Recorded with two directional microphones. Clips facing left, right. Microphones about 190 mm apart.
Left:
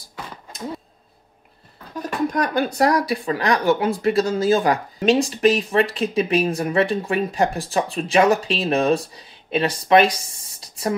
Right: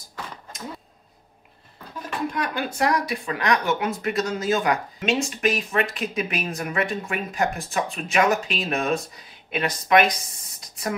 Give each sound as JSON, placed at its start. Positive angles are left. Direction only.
{"t": 2.0, "sound": "speech", "side_deg": 40}